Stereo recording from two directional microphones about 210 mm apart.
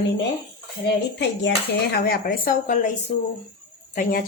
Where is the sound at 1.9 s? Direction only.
45° left (ahead or behind).